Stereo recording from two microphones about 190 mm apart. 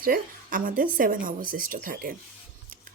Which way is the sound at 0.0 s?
45° right (ahead or behind).